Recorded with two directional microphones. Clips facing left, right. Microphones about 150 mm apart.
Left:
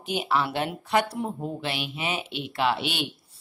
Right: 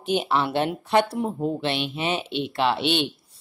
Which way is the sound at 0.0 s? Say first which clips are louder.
Right 3 dB; 30° right (ahead or behind).